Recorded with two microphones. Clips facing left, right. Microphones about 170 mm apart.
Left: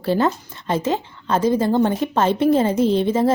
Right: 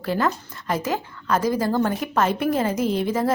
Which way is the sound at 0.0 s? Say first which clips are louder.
Left 4 dB; 30° left (ahead or behind).